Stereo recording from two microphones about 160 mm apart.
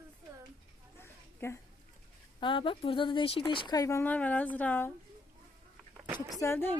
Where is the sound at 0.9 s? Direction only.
15° left (ahead or behind).